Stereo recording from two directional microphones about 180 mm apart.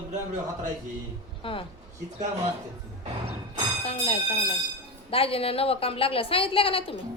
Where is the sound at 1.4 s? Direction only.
30° left (ahead or behind).